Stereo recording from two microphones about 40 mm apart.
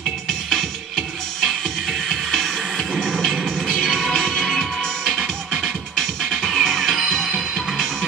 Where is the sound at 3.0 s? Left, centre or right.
Centre.